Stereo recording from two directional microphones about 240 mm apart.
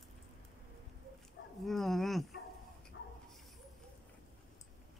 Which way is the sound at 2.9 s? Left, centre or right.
Left.